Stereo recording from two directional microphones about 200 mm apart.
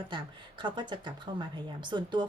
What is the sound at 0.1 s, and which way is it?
Speech, 25° right (ahead or behind).